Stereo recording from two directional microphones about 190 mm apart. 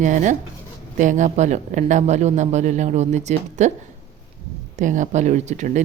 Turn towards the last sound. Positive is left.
turn(degrees=-40)  # may be behind; listen again after turning